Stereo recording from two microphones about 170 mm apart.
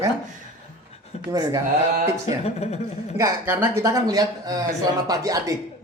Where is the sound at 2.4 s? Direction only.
40° left (ahead or behind).